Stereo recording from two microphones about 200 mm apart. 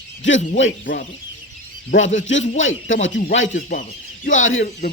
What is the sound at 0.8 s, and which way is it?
Speech, 45° left (ahead or behind).